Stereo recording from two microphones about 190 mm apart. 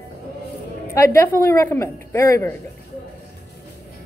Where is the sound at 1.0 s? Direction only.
15° left (ahead or behind).